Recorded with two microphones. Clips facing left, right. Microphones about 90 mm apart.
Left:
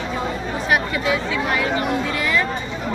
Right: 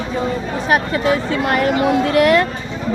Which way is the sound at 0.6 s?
40° right (ahead or behind).